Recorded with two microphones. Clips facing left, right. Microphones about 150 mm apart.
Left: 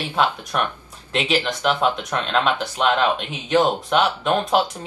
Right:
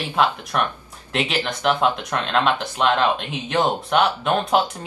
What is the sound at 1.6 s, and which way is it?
Speech, 5° right (ahead or behind).